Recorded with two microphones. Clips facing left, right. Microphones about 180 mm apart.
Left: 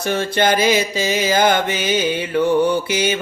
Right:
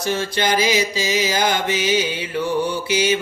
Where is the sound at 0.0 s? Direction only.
55° left (ahead or behind).